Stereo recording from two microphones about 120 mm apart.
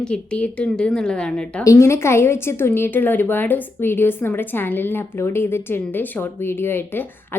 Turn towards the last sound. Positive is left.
turn(degrees=20)  # may be behind; listen again after turning